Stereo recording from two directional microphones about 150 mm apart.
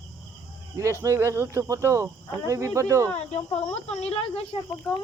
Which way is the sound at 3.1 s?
45° left (ahead or behind).